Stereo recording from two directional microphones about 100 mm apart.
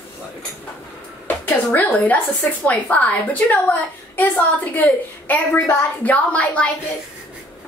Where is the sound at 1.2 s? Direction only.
15° left (ahead or behind).